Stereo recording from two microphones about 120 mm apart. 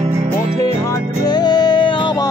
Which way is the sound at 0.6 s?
25° left (ahead or behind).